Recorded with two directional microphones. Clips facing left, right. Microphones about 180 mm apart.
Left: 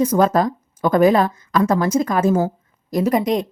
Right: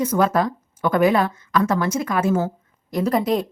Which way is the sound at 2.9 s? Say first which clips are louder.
Left 3 dB; 15° left (ahead or behind).